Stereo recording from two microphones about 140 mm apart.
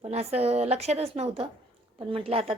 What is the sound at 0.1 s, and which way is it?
A woman's voice, 50° right (ahead or behind).